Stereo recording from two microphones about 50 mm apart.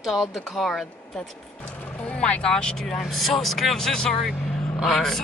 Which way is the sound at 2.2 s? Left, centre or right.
Left.